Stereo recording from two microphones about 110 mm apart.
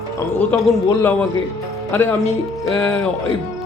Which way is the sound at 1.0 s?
15° left (ahead or behind).